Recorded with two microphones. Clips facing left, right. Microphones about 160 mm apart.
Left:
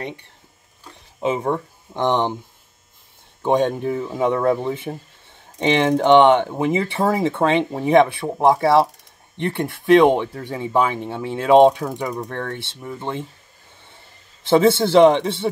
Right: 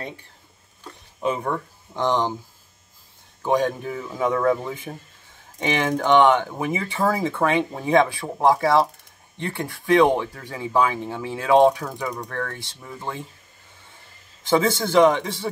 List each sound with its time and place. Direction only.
1.2 s speech: 20° left (ahead or behind)
3.4 s speech: 25° left (ahead or behind)
14.4 s speech: 25° left (ahead or behind)